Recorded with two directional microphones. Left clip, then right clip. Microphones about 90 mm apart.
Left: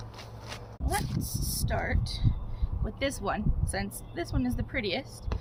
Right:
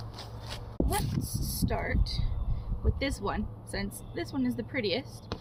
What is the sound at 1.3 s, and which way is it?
A woman's voice, 45° left (ahead or behind).